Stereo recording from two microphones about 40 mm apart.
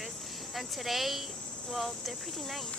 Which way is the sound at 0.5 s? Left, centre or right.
Centre.